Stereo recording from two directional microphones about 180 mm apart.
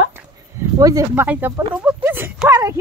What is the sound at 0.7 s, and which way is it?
Speech, 20° right (ahead or behind).